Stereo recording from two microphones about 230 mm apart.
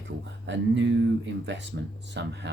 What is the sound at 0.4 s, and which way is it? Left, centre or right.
Speech, right.